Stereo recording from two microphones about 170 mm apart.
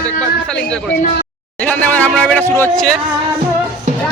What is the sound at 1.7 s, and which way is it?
Speech, 10° left (ahead or behind).